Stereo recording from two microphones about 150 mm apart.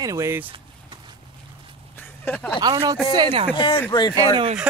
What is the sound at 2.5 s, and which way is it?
Speech, 30° right (ahead or behind).